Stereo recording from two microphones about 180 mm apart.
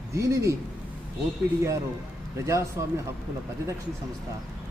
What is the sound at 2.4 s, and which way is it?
Speech, 15° right (ahead or behind).